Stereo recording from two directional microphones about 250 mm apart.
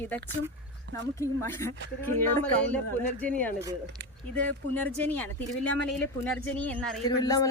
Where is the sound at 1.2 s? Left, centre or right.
Centre.